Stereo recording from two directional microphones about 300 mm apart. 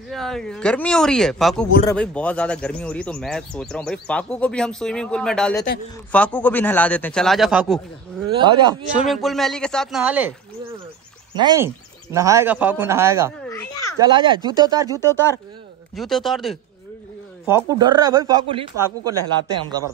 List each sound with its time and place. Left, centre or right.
0.1 s speech: centre
8.4 s speech: centre
9.1 s speech: centre
11.3 s speech: centre
13.5 s a sound: centre
14.0 s speech: centre
15.0 s speech: centre
17.5 s speech: centre